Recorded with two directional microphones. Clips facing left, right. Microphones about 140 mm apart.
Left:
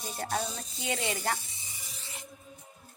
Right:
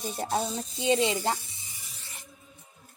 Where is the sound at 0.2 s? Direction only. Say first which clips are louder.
Right 4 dB; 25° right (ahead or behind).